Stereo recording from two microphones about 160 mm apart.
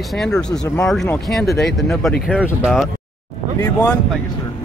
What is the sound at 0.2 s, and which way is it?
Speech, 5° left (ahead or behind).